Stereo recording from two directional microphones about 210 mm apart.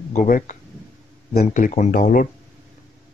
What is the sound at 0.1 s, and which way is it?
Speech, 35° left (ahead or behind).